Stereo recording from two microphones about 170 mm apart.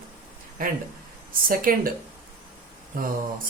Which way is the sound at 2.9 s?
55° right (ahead or behind).